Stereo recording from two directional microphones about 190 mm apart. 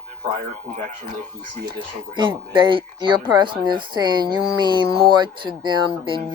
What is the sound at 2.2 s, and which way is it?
Speech, 25° right (ahead or behind).